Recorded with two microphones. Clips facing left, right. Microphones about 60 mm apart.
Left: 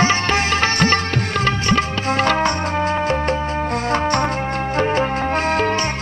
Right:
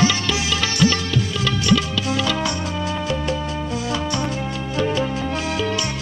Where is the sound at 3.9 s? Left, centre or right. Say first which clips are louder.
Left 6 dB; left.